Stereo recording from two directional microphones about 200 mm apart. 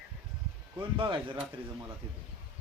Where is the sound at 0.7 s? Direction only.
25° right (ahead or behind).